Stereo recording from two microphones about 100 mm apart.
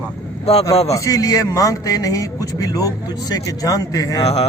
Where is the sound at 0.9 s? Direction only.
35° left (ahead or behind).